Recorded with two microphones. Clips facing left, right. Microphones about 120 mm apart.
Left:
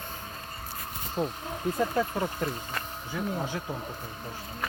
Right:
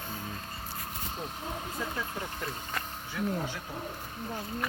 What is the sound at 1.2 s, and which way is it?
Speech, 45° left (ahead or behind).